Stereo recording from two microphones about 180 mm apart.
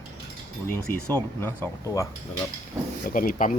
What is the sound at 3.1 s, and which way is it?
Speech, 50° left (ahead or behind).